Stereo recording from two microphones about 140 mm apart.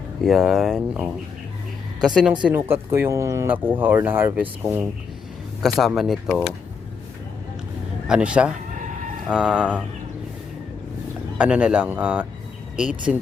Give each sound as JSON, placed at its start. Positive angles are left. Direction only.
{"t": 0.2, "sound": "speech", "side_deg": 0}
{"t": 2.4, "sound": "speech", "side_deg": -15}
{"t": 5.6, "sound": "speech", "side_deg": 0}
{"t": 8.0, "sound": "speech", "side_deg": -5}
{"t": 11.3, "sound": "speech", "side_deg": -10}